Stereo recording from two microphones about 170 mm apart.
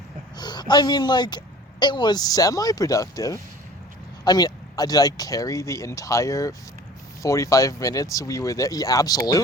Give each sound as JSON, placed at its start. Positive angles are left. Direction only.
{"t": 0.3, "sound": "speech", "side_deg": 25}